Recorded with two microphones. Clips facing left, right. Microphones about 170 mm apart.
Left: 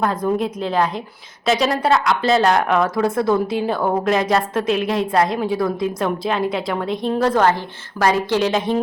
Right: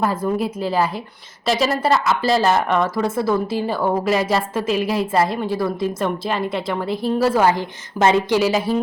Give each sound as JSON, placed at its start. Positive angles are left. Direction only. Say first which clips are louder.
{"t": 0.0, "sound": "a woman's voice", "louder": "left 1 dB", "side_deg": -5}